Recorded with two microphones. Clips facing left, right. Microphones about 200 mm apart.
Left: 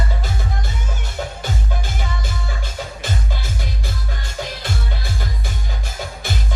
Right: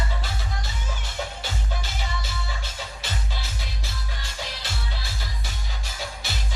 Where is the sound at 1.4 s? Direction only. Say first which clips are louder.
Left 6 dB; 50° left (ahead or behind).